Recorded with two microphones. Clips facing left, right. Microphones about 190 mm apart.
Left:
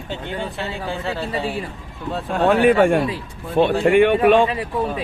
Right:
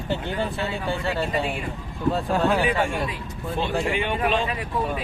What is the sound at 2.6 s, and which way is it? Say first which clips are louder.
Speech: left 9 dB; 60° left (ahead or behind).